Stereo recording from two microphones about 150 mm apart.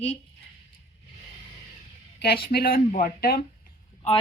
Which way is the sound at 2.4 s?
85° left.